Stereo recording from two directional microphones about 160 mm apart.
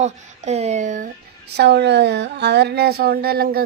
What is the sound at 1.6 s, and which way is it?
Speech, 90° right.